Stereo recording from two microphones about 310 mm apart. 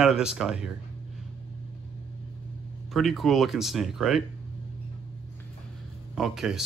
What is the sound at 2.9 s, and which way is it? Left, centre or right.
Speech, centre.